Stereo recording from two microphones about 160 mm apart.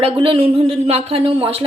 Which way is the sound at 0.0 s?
35° right (ahead or behind).